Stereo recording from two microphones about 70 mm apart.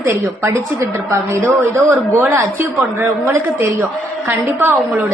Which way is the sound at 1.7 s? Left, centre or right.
Right.